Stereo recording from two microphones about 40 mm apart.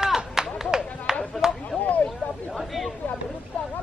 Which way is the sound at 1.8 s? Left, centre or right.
Left.